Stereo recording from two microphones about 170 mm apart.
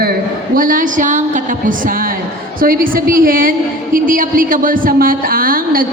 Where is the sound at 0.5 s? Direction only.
55° right (ahead or behind).